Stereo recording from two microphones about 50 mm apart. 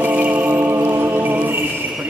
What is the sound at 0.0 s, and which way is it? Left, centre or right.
Music, right.